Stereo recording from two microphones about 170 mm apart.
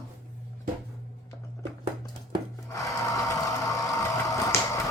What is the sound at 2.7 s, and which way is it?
Sewing machine, 20° left (ahead or behind).